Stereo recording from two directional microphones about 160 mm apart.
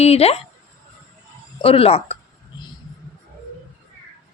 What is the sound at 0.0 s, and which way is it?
Speech, 40° left (ahead or behind).